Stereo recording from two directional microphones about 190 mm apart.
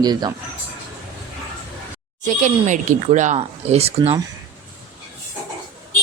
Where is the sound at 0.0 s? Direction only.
20° right (ahead or behind).